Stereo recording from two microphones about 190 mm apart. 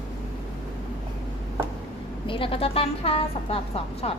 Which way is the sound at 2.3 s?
30° left (ahead or behind).